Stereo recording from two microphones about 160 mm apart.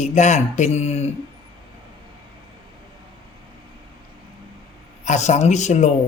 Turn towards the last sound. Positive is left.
turn(degrees=45)  # may be behind; listen again after turning